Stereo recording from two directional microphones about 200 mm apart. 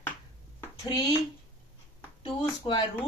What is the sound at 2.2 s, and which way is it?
Speech, 25° left (ahead or behind).